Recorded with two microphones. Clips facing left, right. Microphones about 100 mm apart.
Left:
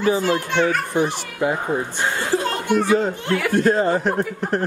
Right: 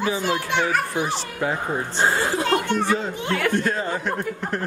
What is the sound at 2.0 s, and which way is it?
Speech, 25° right (ahead or behind).